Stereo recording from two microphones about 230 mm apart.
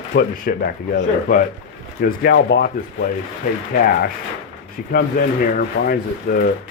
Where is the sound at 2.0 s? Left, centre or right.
Left.